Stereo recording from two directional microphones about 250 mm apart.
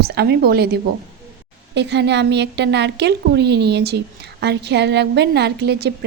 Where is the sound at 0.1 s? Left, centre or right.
Right.